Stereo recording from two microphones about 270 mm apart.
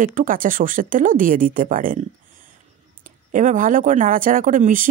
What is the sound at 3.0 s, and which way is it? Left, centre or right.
Speech, right.